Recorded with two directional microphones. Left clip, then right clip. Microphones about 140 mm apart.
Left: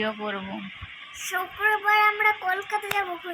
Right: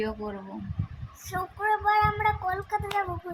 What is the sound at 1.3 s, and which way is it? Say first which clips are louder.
Speech: left 3 dB; 45° right (ahead or behind).